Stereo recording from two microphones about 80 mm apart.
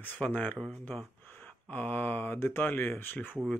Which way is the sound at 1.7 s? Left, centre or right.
Left.